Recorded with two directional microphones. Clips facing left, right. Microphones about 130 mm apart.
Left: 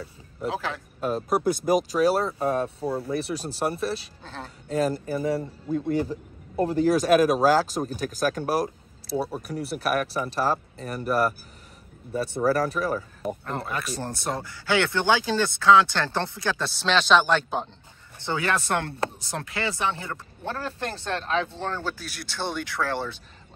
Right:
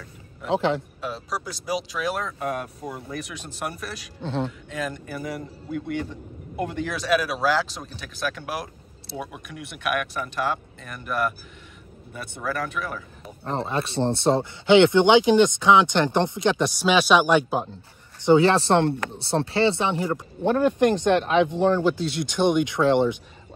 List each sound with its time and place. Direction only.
0.5 s speech: 25° right (ahead or behind)
1.0 s speech: 50° left (ahead or behind); by 4.1 s 30° left (ahead or behind)
4.2 s speech: 30° right (ahead or behind)
4.5 s speech: 35° left (ahead or behind)
13.4 s speech: 30° right (ahead or behind); by 17.7 s 5° right (ahead or behind)
18.2 s speech: 25° right (ahead or behind)